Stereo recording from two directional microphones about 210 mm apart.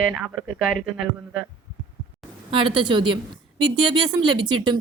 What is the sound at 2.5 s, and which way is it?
A woman's voice, 25° right (ahead or behind).